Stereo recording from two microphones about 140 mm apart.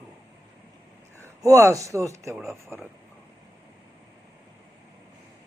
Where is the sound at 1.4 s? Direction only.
20° right (ahead or behind).